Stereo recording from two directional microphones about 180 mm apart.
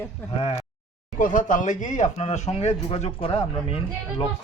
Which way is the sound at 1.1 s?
45° left (ahead or behind).